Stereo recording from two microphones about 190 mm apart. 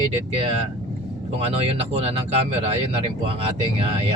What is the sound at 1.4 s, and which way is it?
Speech, 30° right (ahead or behind).